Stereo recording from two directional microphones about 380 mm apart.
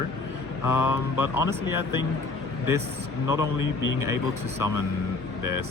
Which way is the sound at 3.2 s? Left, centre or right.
Centre.